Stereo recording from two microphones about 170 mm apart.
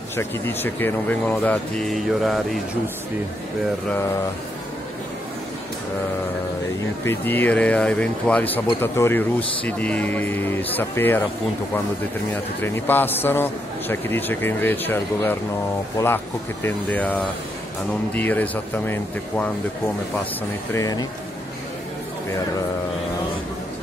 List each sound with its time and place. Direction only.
0.1 s a man's voice: 15° left (ahead or behind)
7.1 s a man's voice: 10° left (ahead or behind)
12.3 s a man's voice: 15° left (ahead or behind)
16.6 s a man's voice: 10° left (ahead or behind)
20.7 s speech: 20° left (ahead or behind)